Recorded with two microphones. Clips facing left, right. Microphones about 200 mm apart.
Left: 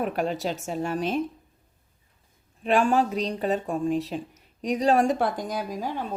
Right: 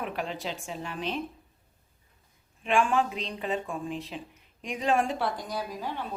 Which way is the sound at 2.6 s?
40° left (ahead or behind).